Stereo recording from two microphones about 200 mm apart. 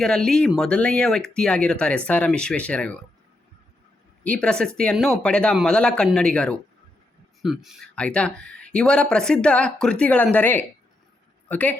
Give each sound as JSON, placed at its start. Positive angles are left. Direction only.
{"t": 0.0, "sound": "speech", "side_deg": 5}
{"t": 4.2, "sound": "a woman's voice", "side_deg": 5}